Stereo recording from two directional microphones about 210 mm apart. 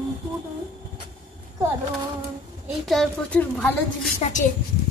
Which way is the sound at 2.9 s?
5° left (ahead or behind).